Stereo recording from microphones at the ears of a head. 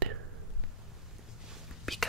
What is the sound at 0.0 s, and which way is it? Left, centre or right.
Whispering, right.